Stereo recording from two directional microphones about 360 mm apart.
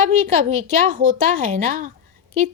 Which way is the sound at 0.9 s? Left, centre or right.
Right.